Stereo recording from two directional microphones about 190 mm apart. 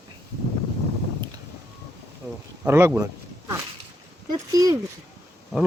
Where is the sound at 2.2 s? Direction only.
15° right (ahead or behind).